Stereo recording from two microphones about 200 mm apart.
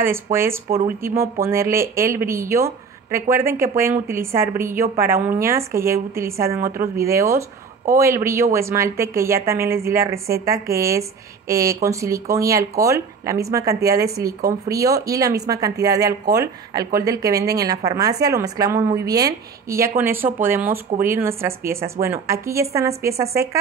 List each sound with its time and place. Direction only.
0.0 s speech: 10° right (ahead or behind)